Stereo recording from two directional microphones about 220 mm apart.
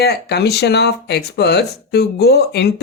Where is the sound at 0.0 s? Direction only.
50° left (ahead or behind).